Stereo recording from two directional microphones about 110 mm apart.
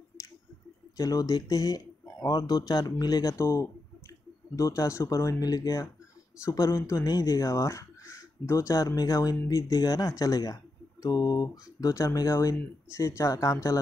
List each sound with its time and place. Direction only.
0.9 s speech: 35° left (ahead or behind)